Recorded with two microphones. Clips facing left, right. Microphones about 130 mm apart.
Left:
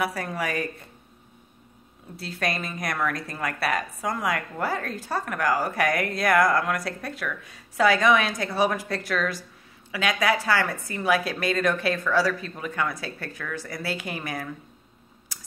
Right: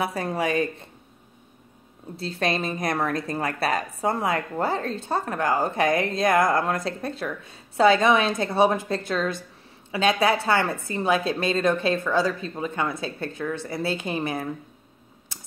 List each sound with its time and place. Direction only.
0.0 s a woman's voice: 25° right (ahead or behind)
2.1 s a woman's voice: 25° right (ahead or behind)
15.3 s a sound: 25° right (ahead or behind)